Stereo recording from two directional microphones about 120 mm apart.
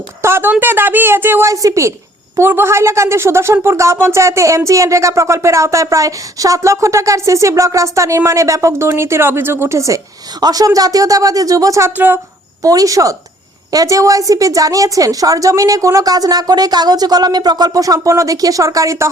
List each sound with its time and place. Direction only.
0.2 s a sound: 20° right (ahead or behind)
0.5 s a woman's voice: 15° right (ahead or behind)
11.9 s a woman's voice: 15° right (ahead or behind)
12.6 s speech: 30° right (ahead or behind)